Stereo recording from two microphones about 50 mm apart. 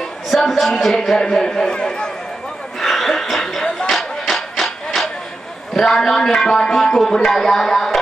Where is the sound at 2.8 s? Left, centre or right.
Centre.